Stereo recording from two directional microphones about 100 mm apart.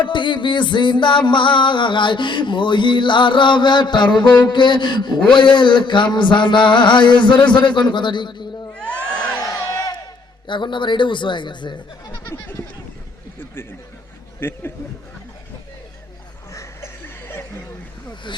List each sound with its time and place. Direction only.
0.0 s music: 55° left (ahead or behind)
8.7 s crowd: 10° left (ahead or behind)
9.1 s a sound: 10° left (ahead or behind)
9.4 s a sound: 35° left (ahead or behind)
10.4 s music: 50° left (ahead or behind)
12.2 s a sound: 30° left (ahead or behind)
14.3 s a man's voice: 25° left (ahead or behind)
16.6 s chuckle: 25° left (ahead or behind)
18.3 s music: 50° left (ahead or behind)